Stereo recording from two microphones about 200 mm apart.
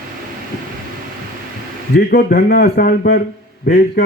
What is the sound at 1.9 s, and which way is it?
A man's voice, 55° left (ahead or behind).